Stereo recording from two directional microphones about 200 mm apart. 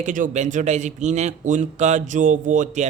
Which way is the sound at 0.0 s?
40° right (ahead or behind).